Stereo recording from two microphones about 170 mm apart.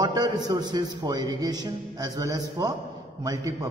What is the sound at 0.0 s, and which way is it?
A man's voice, 25° right (ahead or behind).